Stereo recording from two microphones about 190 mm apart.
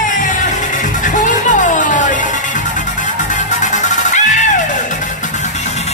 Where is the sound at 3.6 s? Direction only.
40° left (ahead or behind).